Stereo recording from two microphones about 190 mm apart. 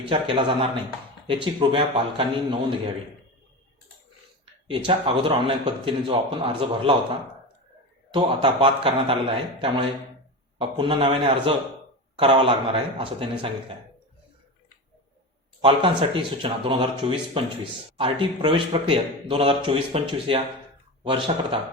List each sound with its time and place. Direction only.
0.1 s a man's voice: 25° right (ahead or behind)
4.7 s a man's voice: 25° right (ahead or behind)
15.6 s a man's voice: 30° right (ahead or behind)